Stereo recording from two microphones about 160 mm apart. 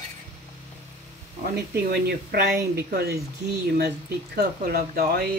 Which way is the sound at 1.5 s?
85° right.